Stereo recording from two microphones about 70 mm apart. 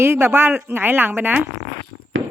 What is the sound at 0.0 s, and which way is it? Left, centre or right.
Speech, right.